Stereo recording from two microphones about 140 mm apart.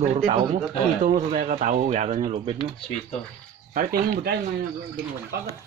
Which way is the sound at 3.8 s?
90° right.